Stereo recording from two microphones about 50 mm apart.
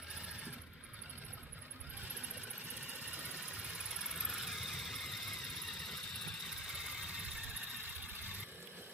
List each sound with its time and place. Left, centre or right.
3.8 s engine: centre